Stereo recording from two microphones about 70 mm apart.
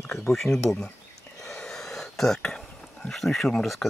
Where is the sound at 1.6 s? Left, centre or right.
Centre.